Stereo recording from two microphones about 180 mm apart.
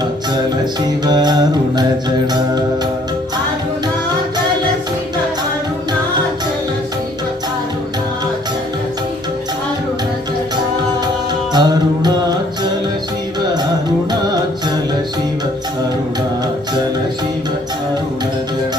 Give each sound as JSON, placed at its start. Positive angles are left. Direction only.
{"t": 1.0, "sound": "music", "side_deg": -20}
{"t": 11.5, "sound": "music", "side_deg": -25}